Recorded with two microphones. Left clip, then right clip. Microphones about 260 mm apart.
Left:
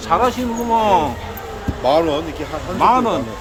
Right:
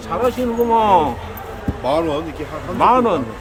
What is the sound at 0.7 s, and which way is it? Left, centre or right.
Speech, centre.